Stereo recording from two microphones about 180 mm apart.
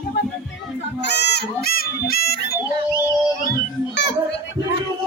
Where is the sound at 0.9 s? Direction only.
70° left (ahead or behind).